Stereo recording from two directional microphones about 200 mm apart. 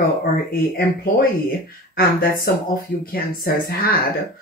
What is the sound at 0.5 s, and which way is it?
Speech, 50° left (ahead or behind).